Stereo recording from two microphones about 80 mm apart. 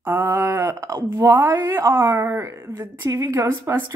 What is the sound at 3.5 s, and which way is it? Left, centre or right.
Speech, right.